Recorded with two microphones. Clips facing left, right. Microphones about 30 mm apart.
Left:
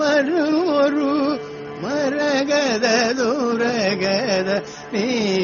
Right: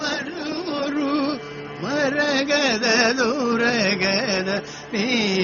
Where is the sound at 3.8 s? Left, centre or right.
Right.